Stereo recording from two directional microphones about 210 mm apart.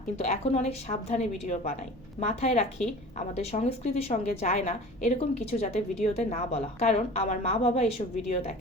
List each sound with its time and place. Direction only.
0.2 s a woman's voice: 30° left (ahead or behind)